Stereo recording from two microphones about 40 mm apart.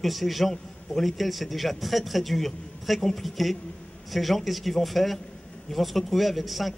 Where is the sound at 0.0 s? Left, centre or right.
Centre.